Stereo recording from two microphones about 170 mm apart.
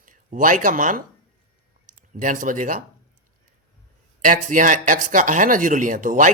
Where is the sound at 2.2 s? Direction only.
50° right (ahead or behind).